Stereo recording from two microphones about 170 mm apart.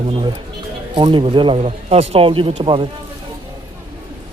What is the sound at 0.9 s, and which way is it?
Speech, 30° right (ahead or behind).